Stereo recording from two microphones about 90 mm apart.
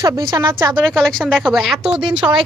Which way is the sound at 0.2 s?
50° right (ahead or behind).